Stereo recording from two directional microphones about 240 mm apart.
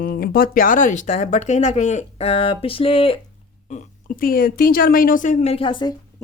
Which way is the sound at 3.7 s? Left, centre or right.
Left.